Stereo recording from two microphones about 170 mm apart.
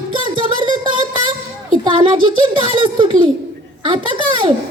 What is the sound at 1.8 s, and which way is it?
A child's voice, 30° right (ahead or behind).